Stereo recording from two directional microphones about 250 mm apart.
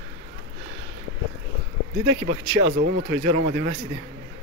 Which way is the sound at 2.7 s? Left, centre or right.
Right.